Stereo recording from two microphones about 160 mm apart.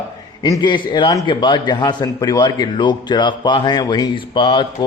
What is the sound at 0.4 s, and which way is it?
A man's voice, 25° left (ahead or behind).